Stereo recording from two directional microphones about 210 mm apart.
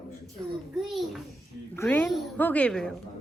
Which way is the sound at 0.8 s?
Centre (ahead or behind).